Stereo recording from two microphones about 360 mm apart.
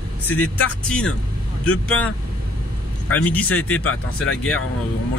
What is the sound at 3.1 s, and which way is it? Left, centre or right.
Speech, centre.